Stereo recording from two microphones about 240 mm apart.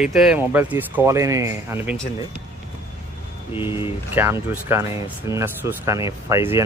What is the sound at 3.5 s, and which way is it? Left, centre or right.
Speech, centre.